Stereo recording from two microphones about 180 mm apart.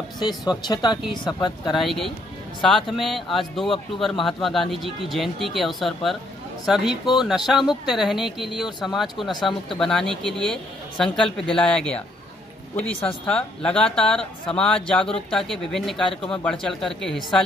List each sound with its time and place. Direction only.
0.2 s speech: 25° left (ahead or behind)
1.8 s speech: centre (ahead or behind)